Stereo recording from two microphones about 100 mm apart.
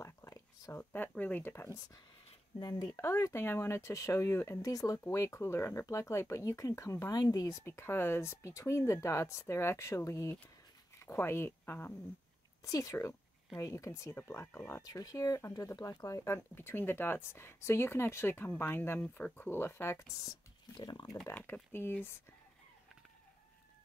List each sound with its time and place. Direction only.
0.0 s a sound: 30° left (ahead or behind)
0.9 s speech: 20° left (ahead or behind)
2.6 s speech: 35° left (ahead or behind)
12.6 s speech: 35° left (ahead or behind)
14.4 s speech: 20° left (ahead or behind)
14.8 s speech: 35° left (ahead or behind)
20.7 s speech: 50° left (ahead or behind)
21.3 s speech: 20° left (ahead or behind)